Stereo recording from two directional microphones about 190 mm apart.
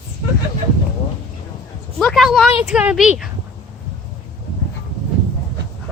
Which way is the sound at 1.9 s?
Centre (ahead or behind).